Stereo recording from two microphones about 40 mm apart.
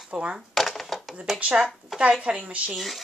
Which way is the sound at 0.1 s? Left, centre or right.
Right.